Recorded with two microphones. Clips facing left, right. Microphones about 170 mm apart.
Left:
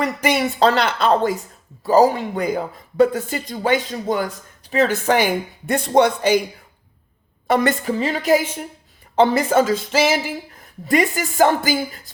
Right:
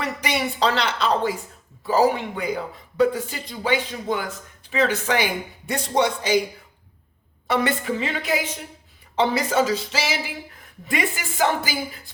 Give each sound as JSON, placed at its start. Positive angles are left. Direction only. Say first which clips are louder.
{"t": 0.0, "sound": "speech", "louder": "left 6 dB", "side_deg": 45}
{"t": 7.4, "sound": "a woman's voice", "louder": "left 4 dB", "side_deg": 45}